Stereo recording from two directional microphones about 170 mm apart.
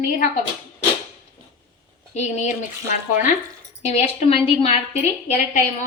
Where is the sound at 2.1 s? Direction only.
40° left (ahead or behind).